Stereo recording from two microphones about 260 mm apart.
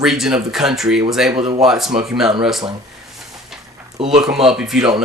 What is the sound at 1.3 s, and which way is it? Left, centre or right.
Speech, right.